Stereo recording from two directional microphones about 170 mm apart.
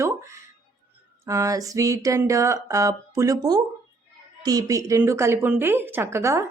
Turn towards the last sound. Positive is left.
turn(degrees=-15)  # may be behind; listen again after turning